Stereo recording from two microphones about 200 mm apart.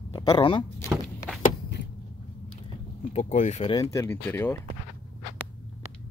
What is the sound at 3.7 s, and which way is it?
Speech, 15° left (ahead or behind).